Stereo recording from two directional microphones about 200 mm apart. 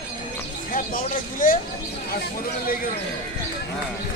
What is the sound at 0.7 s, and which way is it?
Speech, 45° left (ahead or behind).